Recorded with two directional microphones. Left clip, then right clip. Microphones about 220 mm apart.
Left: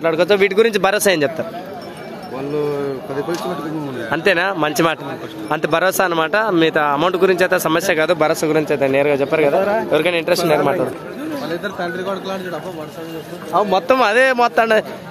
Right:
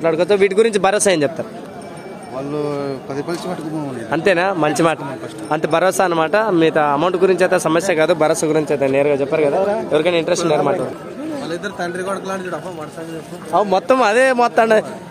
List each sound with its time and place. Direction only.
0.0 s speech: 5° right (ahead or behind)
4.1 s speech: centre (ahead or behind)
11.4 s speech: 20° right (ahead or behind)
13.5 s speech: 15° right (ahead or behind)
13.9 s speech: centre (ahead or behind)